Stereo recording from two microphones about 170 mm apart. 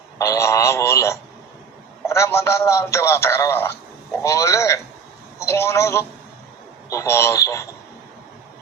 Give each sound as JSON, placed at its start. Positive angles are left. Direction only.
{"t": 0.2, "sound": "a man's voice", "side_deg": 15}